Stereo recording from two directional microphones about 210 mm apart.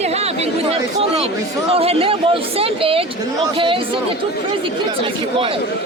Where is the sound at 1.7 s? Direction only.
25° right (ahead or behind).